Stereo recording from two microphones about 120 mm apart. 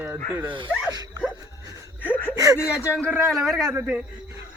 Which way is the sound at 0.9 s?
35° right (ahead or behind).